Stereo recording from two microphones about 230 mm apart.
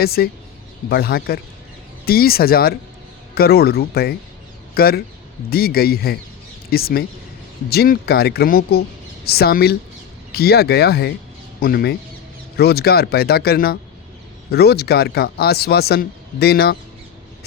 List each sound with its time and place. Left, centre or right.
0.0 s speech: left